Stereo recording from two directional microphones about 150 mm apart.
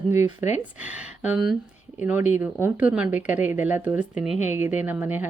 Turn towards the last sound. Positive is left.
turn(degrees=-10)  # may be behind; listen again after turning